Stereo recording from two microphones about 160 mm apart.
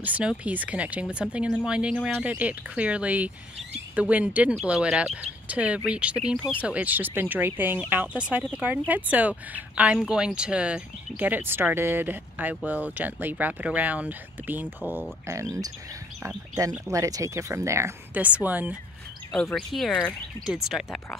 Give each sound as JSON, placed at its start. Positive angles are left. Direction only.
{"t": 0.0, "sound": "speech", "side_deg": -5}
{"t": 19.5, "sound": "speech", "side_deg": 0}